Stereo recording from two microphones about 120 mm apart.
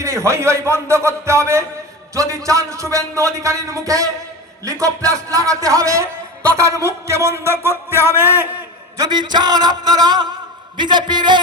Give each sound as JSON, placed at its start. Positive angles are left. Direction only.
{"t": 0.0, "sound": "speech", "side_deg": -25}
{"t": 9.0, "sound": "a man's voice", "side_deg": -35}